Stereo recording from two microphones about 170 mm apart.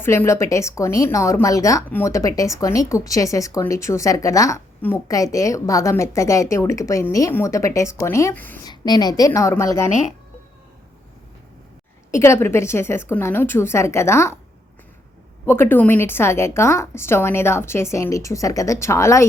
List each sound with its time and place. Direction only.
0.0 s speech: 15° left (ahead or behind)
8.6 s a woman's voice: 25° left (ahead or behind)
12.1 s speech: 15° left (ahead or behind)
15.4 s speech: 15° left (ahead or behind)